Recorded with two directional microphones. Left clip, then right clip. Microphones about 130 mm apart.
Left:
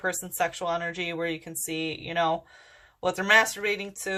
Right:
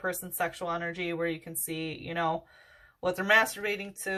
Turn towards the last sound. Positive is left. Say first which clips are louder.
# left 4 dB
turn(degrees=30)  # may be behind; listen again after turning